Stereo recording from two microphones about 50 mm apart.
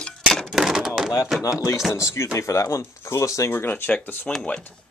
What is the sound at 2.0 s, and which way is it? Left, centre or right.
Speech, left.